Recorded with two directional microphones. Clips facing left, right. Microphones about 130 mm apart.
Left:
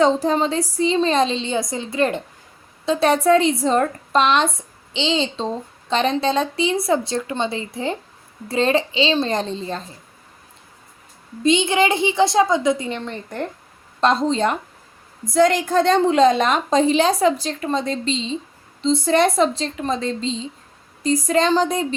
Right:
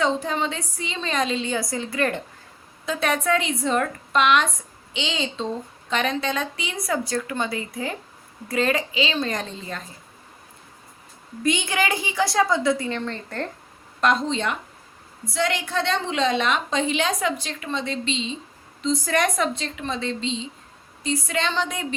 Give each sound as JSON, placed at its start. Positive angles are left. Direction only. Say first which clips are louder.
{"t": 0.0, "sound": "a woman's voice", "louder": "left 6 dB", "side_deg": 35}
{"t": 11.4, "sound": "speech", "louder": "left 6 dB", "side_deg": 25}
{"t": 14.0, "sound": "a woman's voice", "louder": "left 4 dB", "side_deg": 35}